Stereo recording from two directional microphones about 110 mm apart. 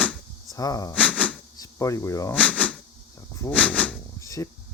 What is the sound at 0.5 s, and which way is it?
Speech, 35° left (ahead or behind).